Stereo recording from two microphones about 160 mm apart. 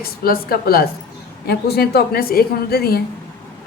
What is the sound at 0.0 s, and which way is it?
A woman's voice, 70° left (ahead or behind).